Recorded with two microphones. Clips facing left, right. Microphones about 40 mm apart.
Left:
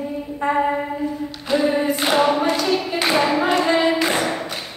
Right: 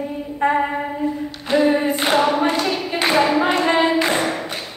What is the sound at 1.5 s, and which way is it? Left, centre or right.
Singing, centre.